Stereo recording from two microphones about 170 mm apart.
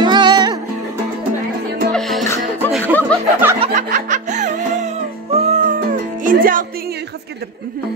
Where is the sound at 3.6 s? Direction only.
45° right (ahead or behind).